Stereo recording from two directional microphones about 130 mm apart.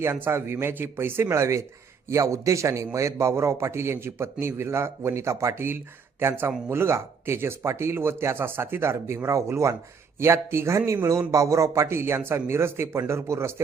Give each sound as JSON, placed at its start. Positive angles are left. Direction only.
{"t": 0.0, "sound": "a man's voice", "side_deg": -20}